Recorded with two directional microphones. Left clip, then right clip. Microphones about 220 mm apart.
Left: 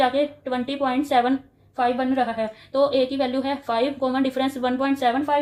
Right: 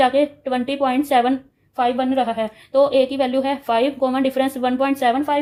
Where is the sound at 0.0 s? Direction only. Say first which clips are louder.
Right 4 dB; 35° right (ahead or behind).